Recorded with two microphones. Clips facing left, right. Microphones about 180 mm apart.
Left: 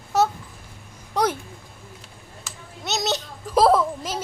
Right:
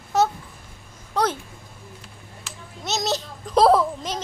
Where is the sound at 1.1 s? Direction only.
15° left (ahead or behind).